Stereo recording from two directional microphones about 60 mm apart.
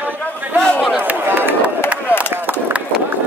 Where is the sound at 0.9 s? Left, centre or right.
Right.